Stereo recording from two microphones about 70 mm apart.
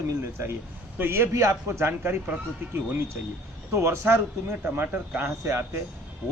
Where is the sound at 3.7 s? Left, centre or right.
Right.